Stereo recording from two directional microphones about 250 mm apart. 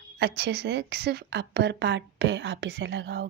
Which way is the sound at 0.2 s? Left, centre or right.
Right.